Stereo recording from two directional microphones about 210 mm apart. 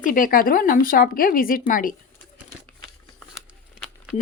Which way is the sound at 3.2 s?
Centre (ahead or behind).